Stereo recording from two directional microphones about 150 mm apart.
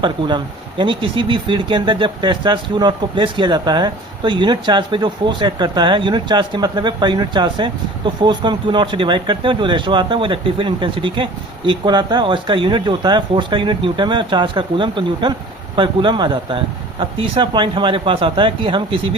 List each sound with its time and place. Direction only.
0.0 s speech: 30° right (ahead or behind)